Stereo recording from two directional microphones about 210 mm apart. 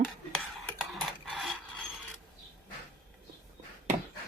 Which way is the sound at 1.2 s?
Centre (ahead or behind).